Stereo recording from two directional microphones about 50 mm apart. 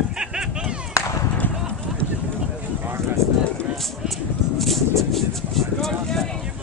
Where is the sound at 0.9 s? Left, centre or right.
Left.